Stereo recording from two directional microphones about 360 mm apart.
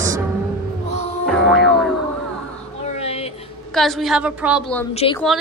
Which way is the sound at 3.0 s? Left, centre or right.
Centre.